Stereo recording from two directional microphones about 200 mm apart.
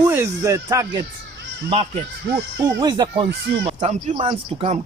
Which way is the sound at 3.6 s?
30° right (ahead or behind).